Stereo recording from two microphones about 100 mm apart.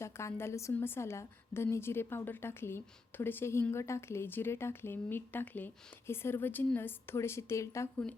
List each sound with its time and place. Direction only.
0.0 s a woman's voice: 25° left (ahead or behind)